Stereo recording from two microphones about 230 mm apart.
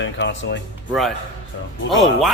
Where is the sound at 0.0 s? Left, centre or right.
Left.